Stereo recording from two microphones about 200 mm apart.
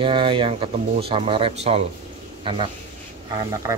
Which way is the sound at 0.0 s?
25° right (ahead or behind).